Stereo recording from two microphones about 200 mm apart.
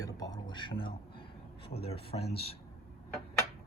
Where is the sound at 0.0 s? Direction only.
20° left (ahead or behind).